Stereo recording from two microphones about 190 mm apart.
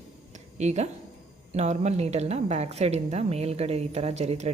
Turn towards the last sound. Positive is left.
turn(degrees=-35)  # may be behind; listen again after turning